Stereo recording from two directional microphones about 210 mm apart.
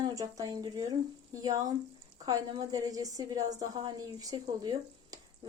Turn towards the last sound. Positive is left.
turn(degrees=-20)  # may be behind; listen again after turning